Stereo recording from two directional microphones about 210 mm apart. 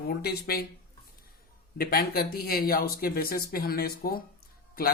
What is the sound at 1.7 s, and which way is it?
Speech, 45° left (ahead or behind).